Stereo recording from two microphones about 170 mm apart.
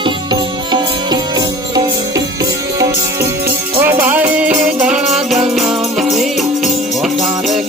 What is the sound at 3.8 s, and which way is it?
Music, 10° right (ahead or behind).